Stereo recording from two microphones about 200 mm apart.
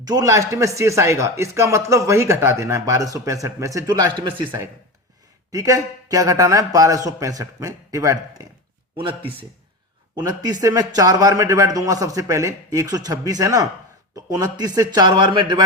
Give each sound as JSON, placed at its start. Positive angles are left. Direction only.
{"t": 0.0, "sound": "a man's voice", "side_deg": -20}